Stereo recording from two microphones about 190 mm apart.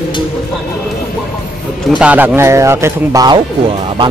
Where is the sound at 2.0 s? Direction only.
5° right (ahead or behind).